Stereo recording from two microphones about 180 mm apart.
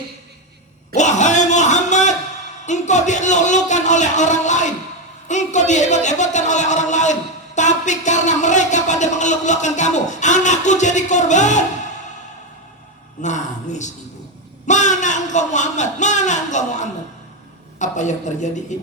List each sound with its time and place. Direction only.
0.9 s a sound: 40° left (ahead or behind)
2.6 s a man's voice: 40° left (ahead or behind)
13.2 s a man's voice: 40° left (ahead or behind)